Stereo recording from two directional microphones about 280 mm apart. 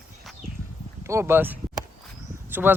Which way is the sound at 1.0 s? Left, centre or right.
Centre.